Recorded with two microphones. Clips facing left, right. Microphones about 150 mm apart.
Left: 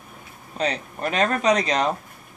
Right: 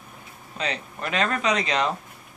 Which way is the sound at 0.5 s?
40° left (ahead or behind).